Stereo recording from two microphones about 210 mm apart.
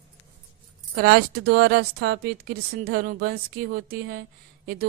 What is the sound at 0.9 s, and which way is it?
Speech, 45° right (ahead or behind).